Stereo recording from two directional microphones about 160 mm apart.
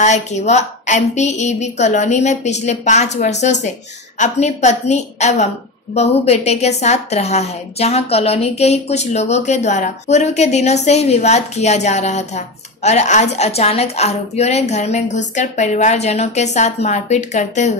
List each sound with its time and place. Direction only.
0.0 s a woman's voice: 45° left (ahead or behind)